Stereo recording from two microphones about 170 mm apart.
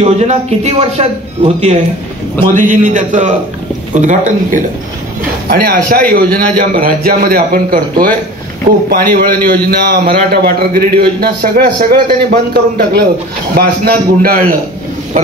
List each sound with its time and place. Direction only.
0.0 s speech: 40° right (ahead or behind)
2.5 s a man's voice: 50° right (ahead or behind)
5.5 s a man's voice: 60° right (ahead or behind)
6.2 s a man's voice: 10° left (ahead or behind)
6.7 s a man's voice: 60° right (ahead or behind)
9.1 s a man's voice: 65° right (ahead or behind)